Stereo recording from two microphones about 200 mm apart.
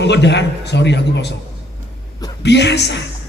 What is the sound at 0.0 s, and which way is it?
A man's voice, 60° left (ahead or behind).